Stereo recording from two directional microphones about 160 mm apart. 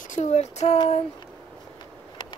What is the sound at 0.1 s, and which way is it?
Speech, 45° left (ahead or behind).